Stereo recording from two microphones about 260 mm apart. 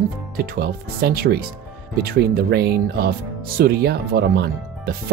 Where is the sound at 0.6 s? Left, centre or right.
Right.